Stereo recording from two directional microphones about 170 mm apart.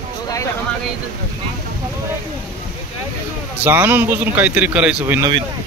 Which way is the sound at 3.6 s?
10° right (ahead or behind).